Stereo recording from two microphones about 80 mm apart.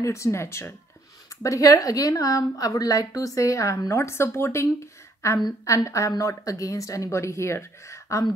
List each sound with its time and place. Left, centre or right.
0.0 s a woman's voice: left